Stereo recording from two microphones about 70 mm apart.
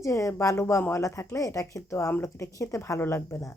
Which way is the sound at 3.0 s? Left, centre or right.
Left.